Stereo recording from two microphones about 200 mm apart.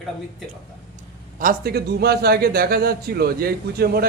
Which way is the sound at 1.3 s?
45° right (ahead or behind).